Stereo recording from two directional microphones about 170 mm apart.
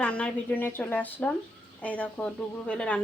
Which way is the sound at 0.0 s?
10° left (ahead or behind).